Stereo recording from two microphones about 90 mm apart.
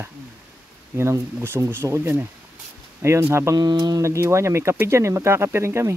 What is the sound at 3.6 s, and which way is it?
Speech, 50° right (ahead or behind).